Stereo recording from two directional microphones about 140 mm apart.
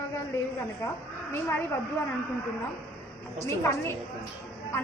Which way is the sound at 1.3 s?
15° left (ahead or behind).